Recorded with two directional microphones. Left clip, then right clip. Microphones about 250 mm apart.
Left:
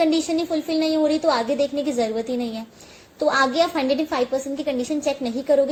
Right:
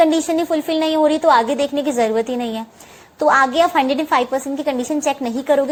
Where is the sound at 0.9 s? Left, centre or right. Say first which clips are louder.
Right 7 dB; right.